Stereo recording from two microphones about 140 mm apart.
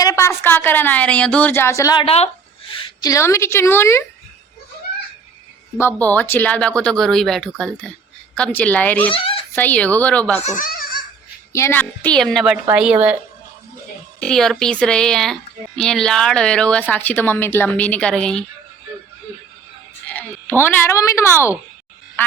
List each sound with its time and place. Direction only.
0.0 s speech: 20° left (ahead or behind)
2.0 s speech: 45° left (ahead or behind)
2.8 s a woman's voice: 25° left (ahead or behind)
5.7 s speech: 15° left (ahead or behind)
9.1 s speech: 40° left (ahead or behind)
9.6 s speech: 10° left (ahead or behind)
10.4 s goat: 70° left (ahead or behind)
11.5 s a woman's voice: 15° left (ahead or behind); by 13.1 s 10° right (ahead or behind)
14.2 s speech: 5° left (ahead or behind)
20.6 s a woman's voice: 20° left (ahead or behind)